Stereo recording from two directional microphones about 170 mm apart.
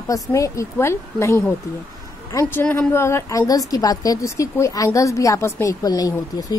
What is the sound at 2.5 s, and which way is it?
A woman's voice, 10° left (ahead or behind).